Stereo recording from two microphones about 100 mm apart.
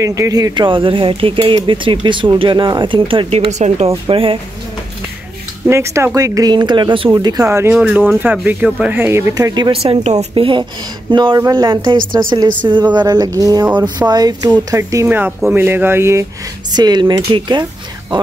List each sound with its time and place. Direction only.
0.0 s speech: 35° right (ahead or behind)
0.7 s speech: 60° right (ahead or behind)
3.3 s a woman's voice: 90° right; by 4.4 s 65° right (ahead or behind)
5.7 s speech: 25° right (ahead or behind); by 7.4 s 45° right (ahead or behind)
7.4 s a man's voice: 25° right (ahead or behind)
7.7 s speech: 15° right (ahead or behind)
9.3 s speech: 45° right (ahead or behind)
9.8 s speech: 60° right (ahead or behind); by 15.0 s 30° right (ahead or behind)
15.0 s a man's voice: 20° right (ahead or behind)
16.7 s speech: 45° right (ahead or behind)